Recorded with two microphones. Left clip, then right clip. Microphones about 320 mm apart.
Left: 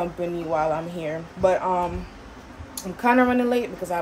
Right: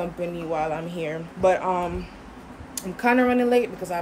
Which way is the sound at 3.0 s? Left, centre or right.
Centre.